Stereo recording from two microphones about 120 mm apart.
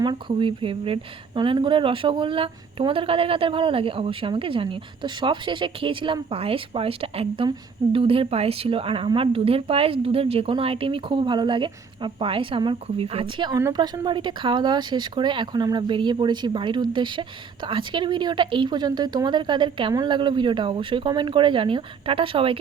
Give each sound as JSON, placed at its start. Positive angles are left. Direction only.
{"t": 0.0, "sound": "speech", "side_deg": -40}
{"t": 13.5, "sound": "speech", "side_deg": -20}
{"t": 13.7, "sound": "speech", "side_deg": -35}